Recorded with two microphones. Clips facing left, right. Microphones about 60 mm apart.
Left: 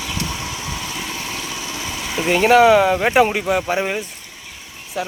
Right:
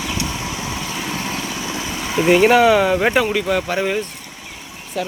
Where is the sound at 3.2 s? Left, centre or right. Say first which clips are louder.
Left 2 dB; left.